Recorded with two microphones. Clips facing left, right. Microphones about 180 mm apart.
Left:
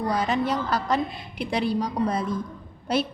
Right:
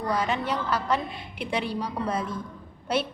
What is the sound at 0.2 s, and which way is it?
A woman's voice, 40° left (ahead or behind).